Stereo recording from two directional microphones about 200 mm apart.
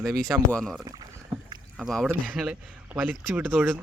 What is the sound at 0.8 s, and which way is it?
Speech, 20° right (ahead or behind).